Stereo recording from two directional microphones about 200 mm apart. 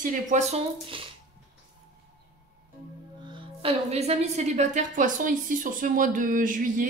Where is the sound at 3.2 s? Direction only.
25° right (ahead or behind).